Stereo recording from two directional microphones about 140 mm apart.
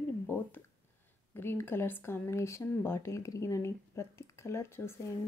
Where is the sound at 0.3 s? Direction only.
15° left (ahead or behind).